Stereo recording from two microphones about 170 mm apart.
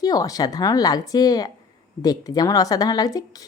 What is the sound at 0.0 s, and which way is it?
Speech, 20° left (ahead or behind).